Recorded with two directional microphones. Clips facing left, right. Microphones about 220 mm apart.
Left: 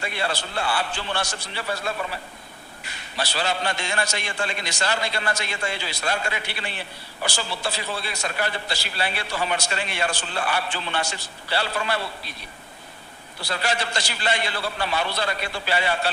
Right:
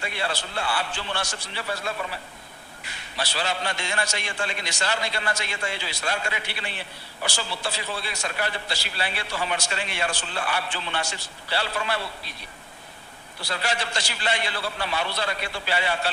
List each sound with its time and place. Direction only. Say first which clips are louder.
0.0 s a man's voice: left 2 dB; 40° left (ahead or behind)
3.2 s a man's voice: left 2 dB; 40° left (ahead or behind)
13.5 s a man's voice: left 2 dB; 45° left (ahead or behind)